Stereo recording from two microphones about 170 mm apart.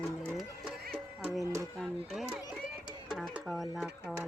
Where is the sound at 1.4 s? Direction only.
20° right (ahead or behind).